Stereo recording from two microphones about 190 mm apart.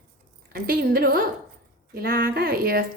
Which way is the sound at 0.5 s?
50° right (ahead or behind).